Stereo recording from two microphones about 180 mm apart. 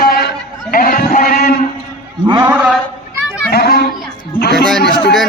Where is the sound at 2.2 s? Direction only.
25° right (ahead or behind).